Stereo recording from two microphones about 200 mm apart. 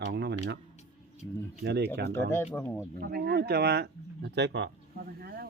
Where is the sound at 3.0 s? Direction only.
50° right (ahead or behind).